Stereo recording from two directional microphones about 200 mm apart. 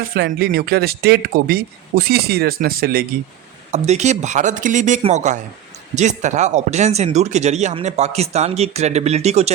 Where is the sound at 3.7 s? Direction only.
35° right (ahead or behind).